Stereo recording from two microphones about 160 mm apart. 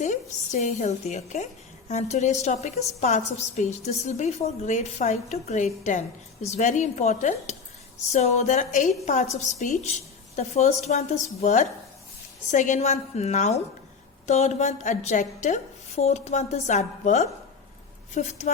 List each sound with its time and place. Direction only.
0.0 s a woman's voice: 50° left (ahead or behind)